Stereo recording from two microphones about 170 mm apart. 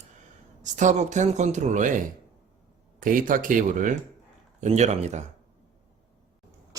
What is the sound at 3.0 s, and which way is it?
Speech, 55° right (ahead or behind).